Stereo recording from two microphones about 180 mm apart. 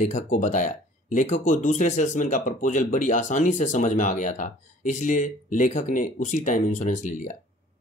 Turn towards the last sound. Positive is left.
turn(degrees=45)  # may be behind; listen again after turning